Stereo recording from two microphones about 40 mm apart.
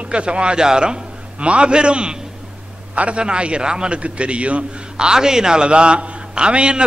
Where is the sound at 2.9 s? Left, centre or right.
Right.